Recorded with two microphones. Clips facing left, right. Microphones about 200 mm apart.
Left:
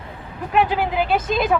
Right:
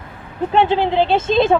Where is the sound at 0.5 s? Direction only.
25° right (ahead or behind).